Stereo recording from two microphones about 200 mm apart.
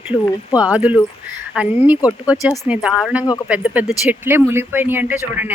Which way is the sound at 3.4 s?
5° right (ahead or behind).